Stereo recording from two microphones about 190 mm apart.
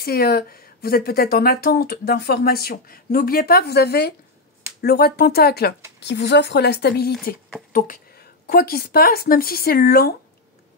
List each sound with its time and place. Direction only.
0.0 s speech: 55° left (ahead or behind)